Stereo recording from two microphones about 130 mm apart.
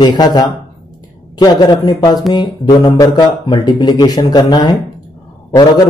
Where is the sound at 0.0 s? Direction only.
35° left (ahead or behind).